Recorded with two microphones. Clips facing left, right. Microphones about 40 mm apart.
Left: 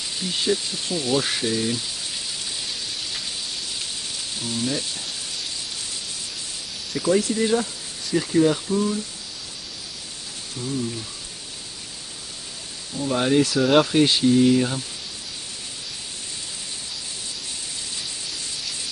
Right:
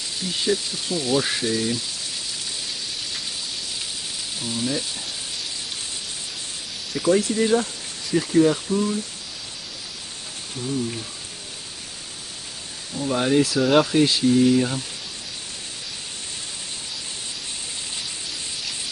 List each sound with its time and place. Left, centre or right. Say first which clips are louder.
0.2 s speech: even; centre
4.4 s speech: even; centre
7.1 s speech: right 1 dB; right
8.1 s speech: right 1 dB; centre
12.9 s speech: even; centre
14.0 s speech: left 1 dB; centre
14.3 s speech: even; centre